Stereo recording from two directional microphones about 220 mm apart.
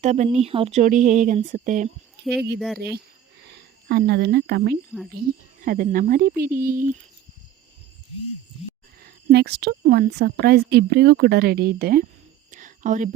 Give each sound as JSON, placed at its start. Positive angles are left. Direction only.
{"t": 0.0, "sound": "speech", "side_deg": -30}
{"t": 2.3, "sound": "a woman's voice", "side_deg": -50}
{"t": 9.0, "sound": "a woman's voice", "side_deg": -45}
{"t": 12.5, "sound": "whispering", "side_deg": -35}